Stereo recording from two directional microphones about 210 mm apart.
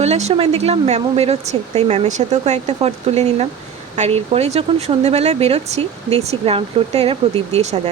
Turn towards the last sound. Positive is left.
turn(degrees=-30)  # may be behind; listen again after turning